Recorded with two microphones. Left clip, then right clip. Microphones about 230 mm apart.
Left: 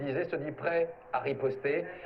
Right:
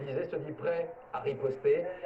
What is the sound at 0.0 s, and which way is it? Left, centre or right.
A man's voice, left.